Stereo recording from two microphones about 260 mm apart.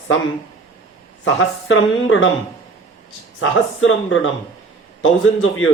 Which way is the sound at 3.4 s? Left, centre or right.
Left.